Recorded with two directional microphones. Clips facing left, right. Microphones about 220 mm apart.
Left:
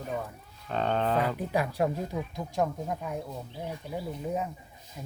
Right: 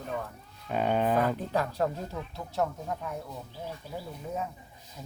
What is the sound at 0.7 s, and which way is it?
Livestock, 10° right (ahead or behind).